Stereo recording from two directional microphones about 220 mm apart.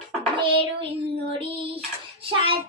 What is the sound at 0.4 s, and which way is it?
Child singing, 25° right (ahead or behind).